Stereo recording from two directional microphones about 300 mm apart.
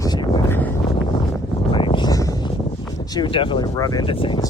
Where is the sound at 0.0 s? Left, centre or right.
Centre.